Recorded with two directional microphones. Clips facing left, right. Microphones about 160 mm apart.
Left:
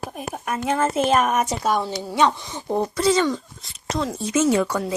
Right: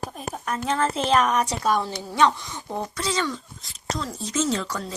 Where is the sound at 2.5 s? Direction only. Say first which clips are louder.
Left 7 dB; 35° left (ahead or behind).